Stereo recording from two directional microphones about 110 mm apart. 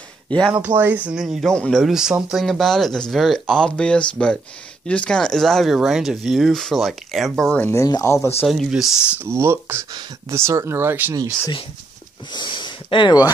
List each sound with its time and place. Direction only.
0.5 s speech: 15° right (ahead or behind)
7.5 s speech: 15° left (ahead or behind)
7.8 s speech: 30° left (ahead or behind)
8.5 s speech: 5° right (ahead or behind)
9.2 s speech: 25° right (ahead or behind)
12.3 s speech: 45° left (ahead or behind)